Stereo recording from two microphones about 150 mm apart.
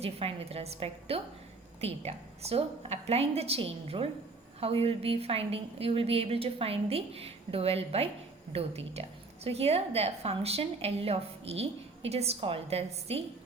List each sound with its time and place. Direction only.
0.0 s a woman's voice: 40° right (ahead or behind)